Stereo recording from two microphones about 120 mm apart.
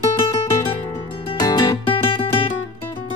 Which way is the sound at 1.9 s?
50° left (ahead or behind).